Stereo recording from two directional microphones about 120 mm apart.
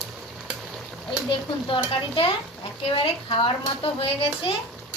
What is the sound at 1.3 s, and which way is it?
A woman's voice, 45° left (ahead or behind).